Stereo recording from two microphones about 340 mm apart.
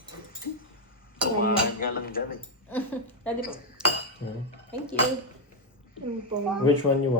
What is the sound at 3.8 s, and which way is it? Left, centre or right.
Cutlery, centre.